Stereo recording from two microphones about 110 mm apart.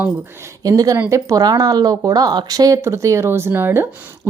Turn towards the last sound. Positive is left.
turn(degrees=-20)  # may be behind; listen again after turning